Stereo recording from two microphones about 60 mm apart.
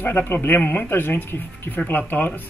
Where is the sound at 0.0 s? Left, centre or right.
Left.